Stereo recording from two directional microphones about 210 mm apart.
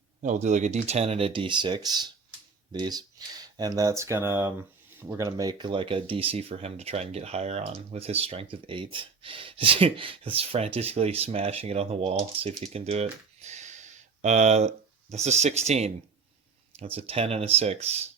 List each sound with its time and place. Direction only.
0.2 s speech: 35° right (ahead or behind)